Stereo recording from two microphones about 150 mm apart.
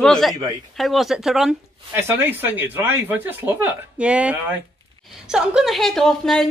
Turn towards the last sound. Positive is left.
turn(degrees=5)  # may be behind; listen again after turning